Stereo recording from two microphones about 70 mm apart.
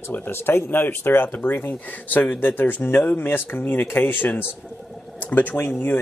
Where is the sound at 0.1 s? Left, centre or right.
Left.